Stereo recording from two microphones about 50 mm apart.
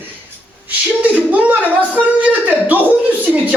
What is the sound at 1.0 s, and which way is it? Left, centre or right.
Speech, right.